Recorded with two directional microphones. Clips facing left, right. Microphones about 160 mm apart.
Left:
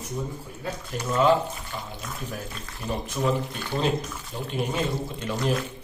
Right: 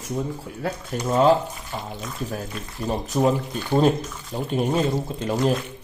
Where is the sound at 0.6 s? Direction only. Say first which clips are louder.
Right 5 dB; 80° right.